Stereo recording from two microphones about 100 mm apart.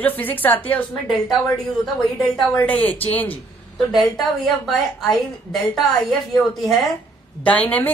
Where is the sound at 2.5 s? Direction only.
15° left (ahead or behind).